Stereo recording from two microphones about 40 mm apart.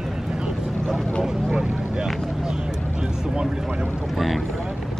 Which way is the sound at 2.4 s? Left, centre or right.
Right.